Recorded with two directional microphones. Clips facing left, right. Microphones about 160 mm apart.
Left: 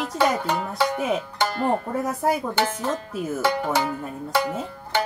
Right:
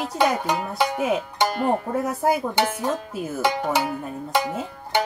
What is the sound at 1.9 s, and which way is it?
Speech, centre (ahead or behind).